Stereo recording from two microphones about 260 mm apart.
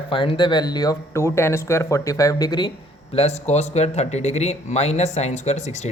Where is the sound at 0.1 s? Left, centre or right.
Centre.